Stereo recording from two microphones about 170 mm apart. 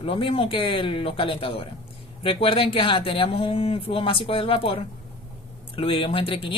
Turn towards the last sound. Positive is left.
turn(degrees=30)  # may be behind; listen again after turning